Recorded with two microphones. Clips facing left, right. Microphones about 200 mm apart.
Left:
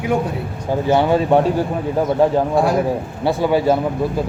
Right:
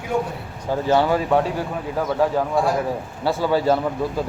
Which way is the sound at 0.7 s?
15° left (ahead or behind).